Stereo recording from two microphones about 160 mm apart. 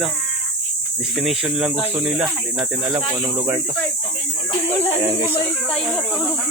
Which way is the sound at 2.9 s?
15° right (ahead or behind).